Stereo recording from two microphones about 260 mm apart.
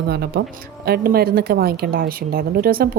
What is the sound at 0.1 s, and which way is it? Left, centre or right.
A woman's voice, right.